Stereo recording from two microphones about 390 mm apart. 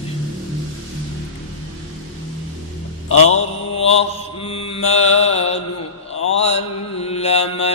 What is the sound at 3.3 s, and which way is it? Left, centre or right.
Mantra, centre.